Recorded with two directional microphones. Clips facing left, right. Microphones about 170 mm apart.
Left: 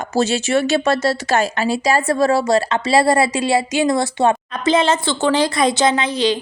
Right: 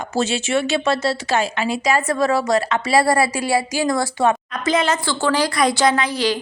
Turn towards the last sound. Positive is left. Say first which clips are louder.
# left 1 dB
turn(degrees=20)  # may be behind; listen again after turning